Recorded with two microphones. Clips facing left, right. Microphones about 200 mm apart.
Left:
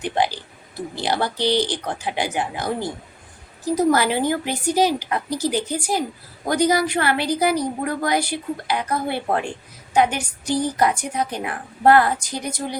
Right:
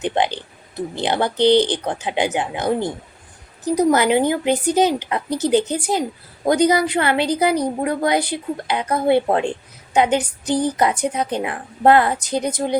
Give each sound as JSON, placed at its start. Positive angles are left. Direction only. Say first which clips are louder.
{"t": 0.0, "sound": "a woman's voice", "louder": "right 2 dB", "side_deg": -20}